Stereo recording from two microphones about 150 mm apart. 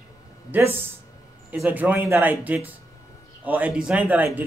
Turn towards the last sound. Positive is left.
turn(degrees=-10)  # may be behind; listen again after turning